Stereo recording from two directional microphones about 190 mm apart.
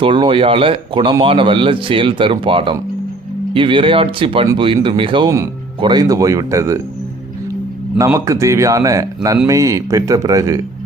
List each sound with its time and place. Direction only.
0.0 s a man's voice: 25° right (ahead or behind)
7.9 s a man's voice: 15° right (ahead or behind)